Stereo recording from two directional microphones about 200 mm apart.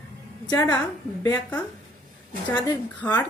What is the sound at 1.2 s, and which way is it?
Speech, 5° left (ahead or behind).